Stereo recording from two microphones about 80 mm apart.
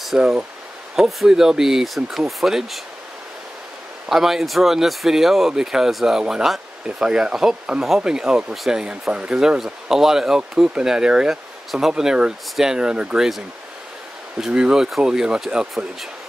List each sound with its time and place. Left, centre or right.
0.0 s a sound: centre
0.9 s speech: centre
4.1 s speech: centre
14.4 s speech: centre